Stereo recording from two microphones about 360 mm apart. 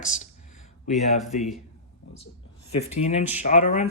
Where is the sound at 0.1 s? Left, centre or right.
Centre.